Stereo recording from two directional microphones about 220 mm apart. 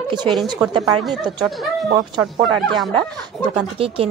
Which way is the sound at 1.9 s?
20° right (ahead or behind).